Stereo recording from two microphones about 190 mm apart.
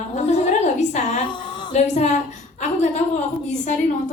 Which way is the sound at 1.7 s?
35° left (ahead or behind).